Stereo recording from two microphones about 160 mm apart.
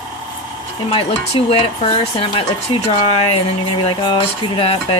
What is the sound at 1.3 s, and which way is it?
Speech, 40° left (ahead or behind).